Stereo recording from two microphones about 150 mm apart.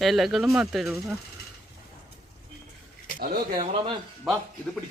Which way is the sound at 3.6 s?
30° right (ahead or behind).